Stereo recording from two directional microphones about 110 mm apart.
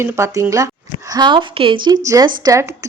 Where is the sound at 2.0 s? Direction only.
30° right (ahead or behind).